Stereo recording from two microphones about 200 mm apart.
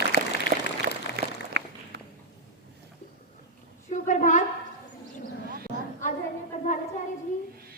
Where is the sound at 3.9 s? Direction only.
40° left (ahead or behind).